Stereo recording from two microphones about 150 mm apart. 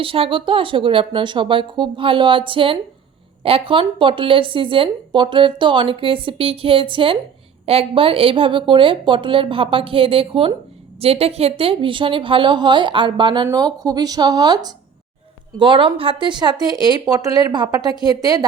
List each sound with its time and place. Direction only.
0.0 s speech: 35° right (ahead or behind)